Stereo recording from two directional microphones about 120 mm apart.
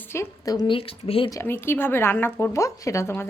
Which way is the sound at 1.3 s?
20° left (ahead or behind).